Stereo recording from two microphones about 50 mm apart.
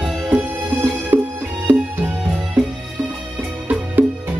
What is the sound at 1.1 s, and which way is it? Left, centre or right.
Music, right.